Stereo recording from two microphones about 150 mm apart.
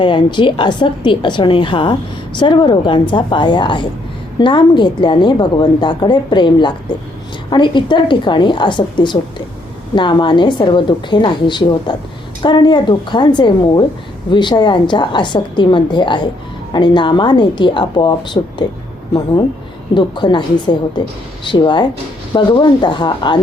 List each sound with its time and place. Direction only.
0.0 s a woman's voice: 30° left (ahead or behind)
19.9 s a woman's voice: 30° left (ahead or behind)